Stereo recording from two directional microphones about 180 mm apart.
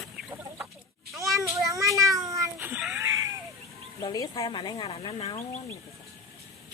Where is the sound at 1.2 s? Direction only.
Centre (ahead or behind).